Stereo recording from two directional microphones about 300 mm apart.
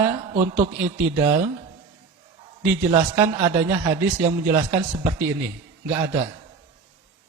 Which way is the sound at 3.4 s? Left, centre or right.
Centre.